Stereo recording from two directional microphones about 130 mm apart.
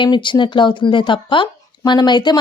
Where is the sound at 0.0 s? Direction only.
40° left (ahead or behind).